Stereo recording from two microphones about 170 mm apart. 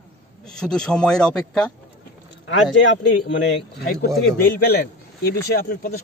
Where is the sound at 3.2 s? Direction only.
90° left.